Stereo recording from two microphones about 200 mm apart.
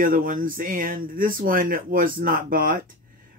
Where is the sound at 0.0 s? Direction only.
45° right (ahead or behind).